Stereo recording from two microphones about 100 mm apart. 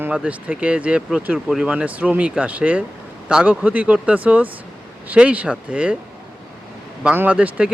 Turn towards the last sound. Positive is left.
turn(degrees=-15)  # may be behind; listen again after turning